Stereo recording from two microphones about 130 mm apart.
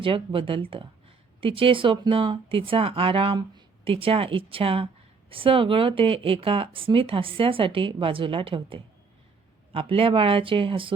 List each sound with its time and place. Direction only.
0.0 s speech: 40° right (ahead or behind)